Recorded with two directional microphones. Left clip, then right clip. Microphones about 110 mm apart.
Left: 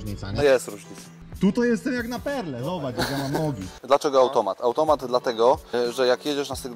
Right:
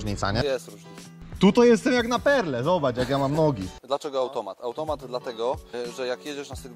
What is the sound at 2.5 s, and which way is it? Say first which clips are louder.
Speech: right 7 dB; 10° left (ahead or behind).